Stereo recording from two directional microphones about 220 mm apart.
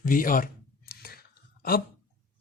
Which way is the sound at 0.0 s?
40° left (ahead or behind).